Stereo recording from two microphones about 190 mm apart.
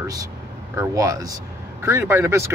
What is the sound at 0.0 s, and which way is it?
Speech, 20° right (ahead or behind).